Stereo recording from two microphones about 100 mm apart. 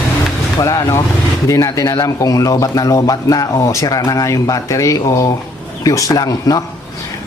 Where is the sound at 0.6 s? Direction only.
30° left (ahead or behind).